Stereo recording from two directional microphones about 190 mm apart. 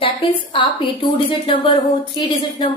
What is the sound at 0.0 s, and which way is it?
Speech, 25° left (ahead or behind).